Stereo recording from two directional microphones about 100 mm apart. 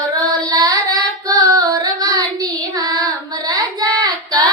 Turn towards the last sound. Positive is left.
turn(degrees=-40)  # may be behind; listen again after turning